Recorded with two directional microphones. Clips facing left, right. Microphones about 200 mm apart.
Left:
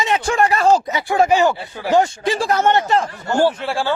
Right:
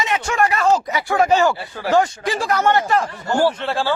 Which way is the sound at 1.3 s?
15° left (ahead or behind).